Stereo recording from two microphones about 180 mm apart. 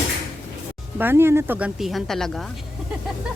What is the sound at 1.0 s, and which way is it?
Speech, 10° right (ahead or behind).